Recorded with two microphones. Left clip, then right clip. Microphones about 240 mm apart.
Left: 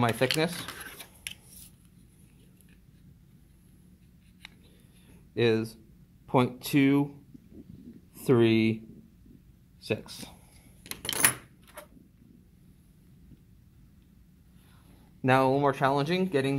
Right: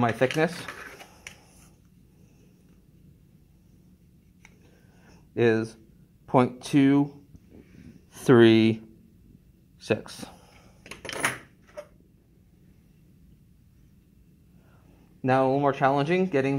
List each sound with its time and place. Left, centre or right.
0.0 s speech: right
5.3 s speech: right
8.1 s speech: right
15.2 s speech: centre